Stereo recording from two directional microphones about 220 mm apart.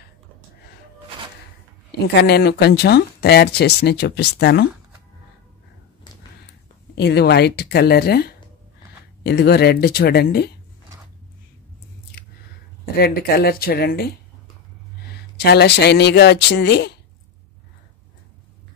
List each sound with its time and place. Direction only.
2.1 s speech: 50° left (ahead or behind)
7.0 s speech: 50° left (ahead or behind)
12.9 s speech: 45° left (ahead or behind)
15.3 s speech: 50° left (ahead or behind)